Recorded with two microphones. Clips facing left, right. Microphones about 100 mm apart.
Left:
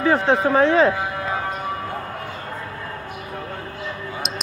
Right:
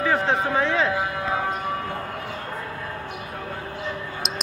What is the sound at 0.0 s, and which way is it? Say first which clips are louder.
Speech: left 4 dB; 35° left (ahead or behind).